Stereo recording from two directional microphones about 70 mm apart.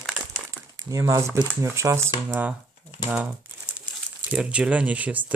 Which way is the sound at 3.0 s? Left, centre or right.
Left.